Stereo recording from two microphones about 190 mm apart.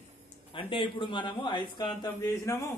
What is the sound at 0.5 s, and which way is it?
A man's voice, 25° left (ahead or behind).